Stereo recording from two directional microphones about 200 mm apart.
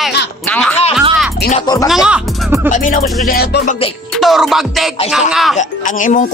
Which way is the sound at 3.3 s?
55° left (ahead or behind).